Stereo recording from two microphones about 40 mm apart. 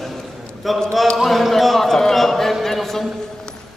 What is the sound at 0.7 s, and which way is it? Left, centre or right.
Speech, centre.